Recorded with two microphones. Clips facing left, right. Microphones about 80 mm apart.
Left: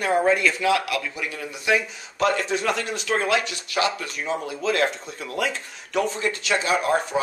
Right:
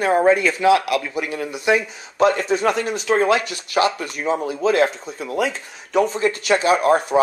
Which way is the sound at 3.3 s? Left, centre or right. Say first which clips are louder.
Right 4 dB; right.